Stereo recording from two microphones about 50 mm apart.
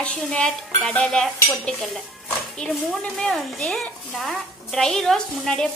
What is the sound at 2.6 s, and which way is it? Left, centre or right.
Dishes, centre.